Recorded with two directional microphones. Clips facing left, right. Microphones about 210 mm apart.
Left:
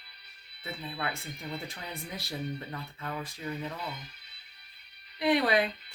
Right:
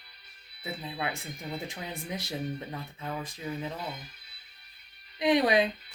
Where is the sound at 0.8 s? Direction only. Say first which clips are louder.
Right 1 dB; 15° right (ahead or behind).